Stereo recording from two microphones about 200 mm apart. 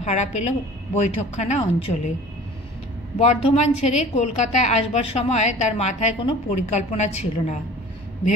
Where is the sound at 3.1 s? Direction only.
30° left (ahead or behind).